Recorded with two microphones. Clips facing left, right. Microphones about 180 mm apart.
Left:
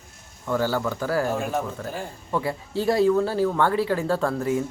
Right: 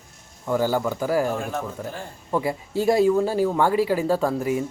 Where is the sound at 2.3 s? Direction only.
15° right (ahead or behind).